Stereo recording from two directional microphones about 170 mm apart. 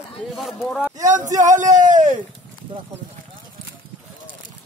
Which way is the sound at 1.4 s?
45° right (ahead or behind).